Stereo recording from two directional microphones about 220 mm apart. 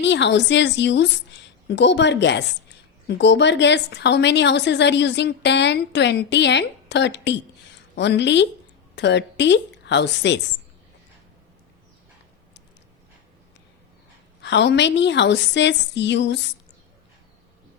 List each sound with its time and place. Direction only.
0.0 s a woman's voice: 50° left (ahead or behind)
14.4 s a woman's voice: 50° left (ahead or behind)